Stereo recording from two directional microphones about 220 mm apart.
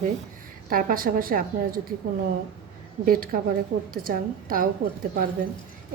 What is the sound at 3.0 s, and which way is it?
A woman's voice, 40° right (ahead or behind).